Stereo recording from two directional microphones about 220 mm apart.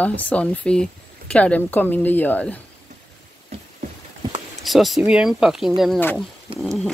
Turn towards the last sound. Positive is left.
turn(degrees=0)  # may be behind; listen again after turning